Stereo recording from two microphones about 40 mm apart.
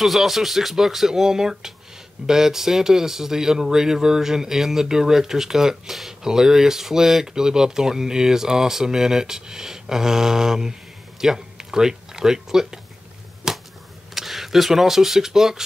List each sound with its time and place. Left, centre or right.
0.0 s speech: centre
13.4 s a sound: centre
14.1 s speech: centre